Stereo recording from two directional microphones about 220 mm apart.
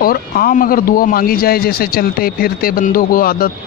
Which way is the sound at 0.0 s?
40° left (ahead or behind).